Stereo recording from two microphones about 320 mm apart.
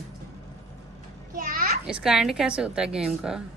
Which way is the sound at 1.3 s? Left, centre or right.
Right.